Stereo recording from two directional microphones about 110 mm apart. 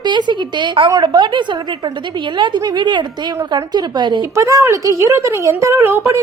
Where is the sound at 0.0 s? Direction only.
45° right (ahead or behind).